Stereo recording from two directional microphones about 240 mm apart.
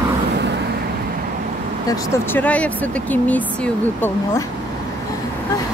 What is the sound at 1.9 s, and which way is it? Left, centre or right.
Speech, centre.